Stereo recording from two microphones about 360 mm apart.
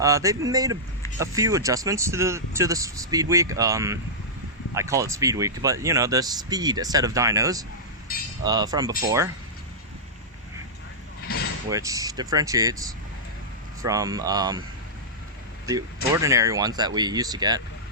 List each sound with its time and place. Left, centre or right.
0.0 s speech: centre
11.3 s mechanisms: left
11.7 s speech: centre
16.1 s speech: centre